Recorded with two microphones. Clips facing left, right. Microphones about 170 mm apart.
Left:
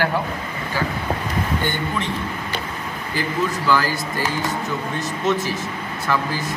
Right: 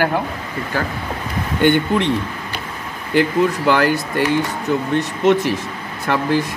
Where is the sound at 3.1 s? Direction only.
65° right (ahead or behind).